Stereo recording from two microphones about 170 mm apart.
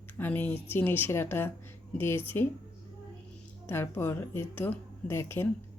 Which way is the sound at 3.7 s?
15° left (ahead or behind).